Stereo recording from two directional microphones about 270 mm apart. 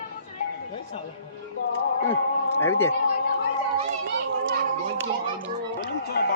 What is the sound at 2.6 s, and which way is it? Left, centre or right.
Speech, centre.